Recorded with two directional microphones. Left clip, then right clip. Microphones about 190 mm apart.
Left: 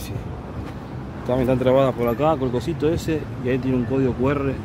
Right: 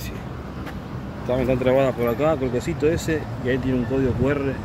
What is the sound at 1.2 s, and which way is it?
Speech, 20° left (ahead or behind).